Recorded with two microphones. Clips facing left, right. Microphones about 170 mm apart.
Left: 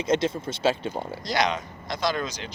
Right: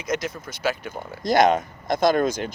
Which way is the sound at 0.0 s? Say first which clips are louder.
Left 4 dB; 30° left (ahead or behind).